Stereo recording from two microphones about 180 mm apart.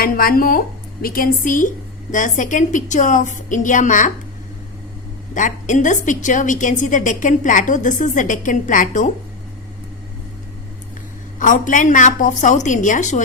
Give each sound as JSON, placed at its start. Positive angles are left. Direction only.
{"t": 0.0, "sound": "a woman's voice", "side_deg": 55}
{"t": 5.3, "sound": "a woman's voice", "side_deg": 45}
{"t": 11.3, "sound": "a woman's voice", "side_deg": 45}